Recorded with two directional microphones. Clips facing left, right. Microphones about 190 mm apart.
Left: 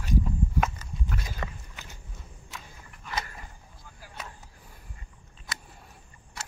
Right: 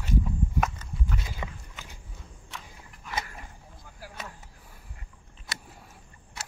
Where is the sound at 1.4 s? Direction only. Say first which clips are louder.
Left 1 dB; 10° right (ahead or behind).